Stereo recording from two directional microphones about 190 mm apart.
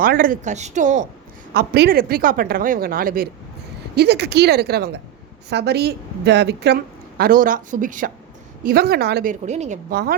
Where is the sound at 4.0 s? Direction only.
60° right (ahead or behind); by 8.1 s 45° right (ahead or behind).